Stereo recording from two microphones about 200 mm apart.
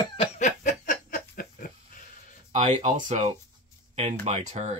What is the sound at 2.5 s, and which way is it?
Speech, 35° right (ahead or behind).